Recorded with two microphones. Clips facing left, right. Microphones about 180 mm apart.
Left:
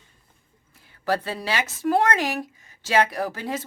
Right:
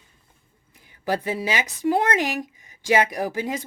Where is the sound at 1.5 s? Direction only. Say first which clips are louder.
Even; 15° right (ahead or behind).